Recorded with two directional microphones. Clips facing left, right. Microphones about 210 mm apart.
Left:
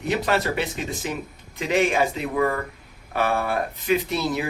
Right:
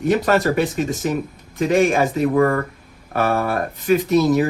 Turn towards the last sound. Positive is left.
turn(degrees=-45)  # may be behind; listen again after turning